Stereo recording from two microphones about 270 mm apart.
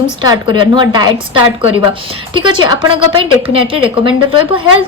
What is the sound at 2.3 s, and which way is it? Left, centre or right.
A woman's voice, centre.